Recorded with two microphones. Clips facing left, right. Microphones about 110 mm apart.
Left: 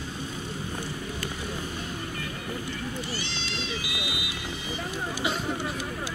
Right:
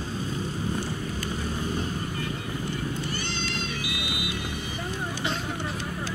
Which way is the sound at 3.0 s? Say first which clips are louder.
Right 3 dB; 50° right (ahead or behind).